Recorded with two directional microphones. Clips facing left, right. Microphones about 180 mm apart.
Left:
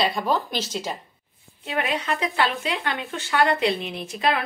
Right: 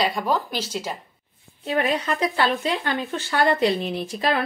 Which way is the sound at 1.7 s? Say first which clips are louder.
Right 3 dB; 35° right (ahead or behind).